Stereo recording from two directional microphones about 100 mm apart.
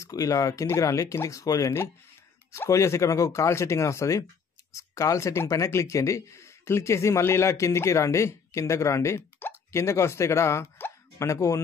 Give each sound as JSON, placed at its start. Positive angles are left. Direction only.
{"t": 0.0, "sound": "speech", "side_deg": 35}